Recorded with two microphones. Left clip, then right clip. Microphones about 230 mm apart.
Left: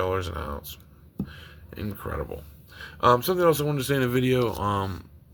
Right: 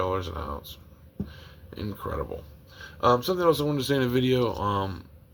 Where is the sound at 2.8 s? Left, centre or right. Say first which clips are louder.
Left 2 dB; left.